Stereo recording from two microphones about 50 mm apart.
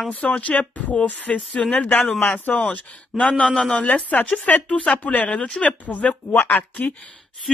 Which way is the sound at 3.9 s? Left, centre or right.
Left.